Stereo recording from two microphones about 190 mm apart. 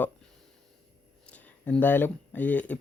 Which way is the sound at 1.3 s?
10° left (ahead or behind).